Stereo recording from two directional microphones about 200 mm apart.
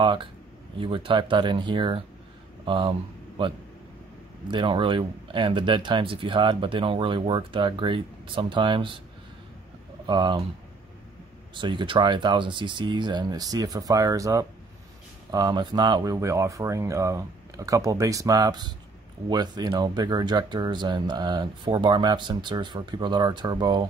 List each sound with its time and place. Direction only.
0.0 s speech: 25° right (ahead or behind)
10.0 s speech: 20° right (ahead or behind)
11.5 s speech: 25° right (ahead or behind)